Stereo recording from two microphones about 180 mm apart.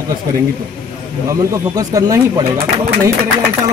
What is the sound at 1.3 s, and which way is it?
Speech, 20° right (ahead or behind).